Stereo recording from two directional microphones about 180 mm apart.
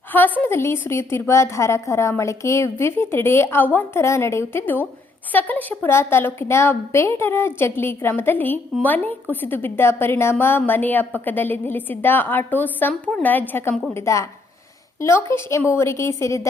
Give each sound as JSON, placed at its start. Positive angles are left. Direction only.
{"t": 0.1, "sound": "a woman's voice", "side_deg": 10}